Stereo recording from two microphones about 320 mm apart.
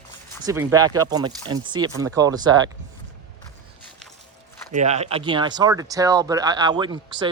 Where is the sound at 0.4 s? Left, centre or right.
Centre.